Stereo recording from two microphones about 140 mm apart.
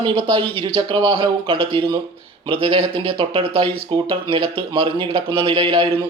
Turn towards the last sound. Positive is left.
turn(degrees=-40)  # may be behind; listen again after turning